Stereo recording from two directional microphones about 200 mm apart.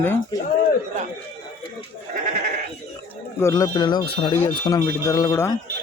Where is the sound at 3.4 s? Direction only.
20° left (ahead or behind).